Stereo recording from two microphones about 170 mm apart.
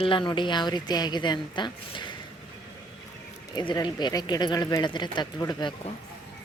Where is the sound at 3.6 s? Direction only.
25° left (ahead or behind).